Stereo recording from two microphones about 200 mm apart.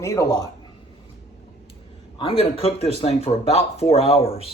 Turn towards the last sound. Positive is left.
turn(degrees=30)  # may be behind; listen again after turning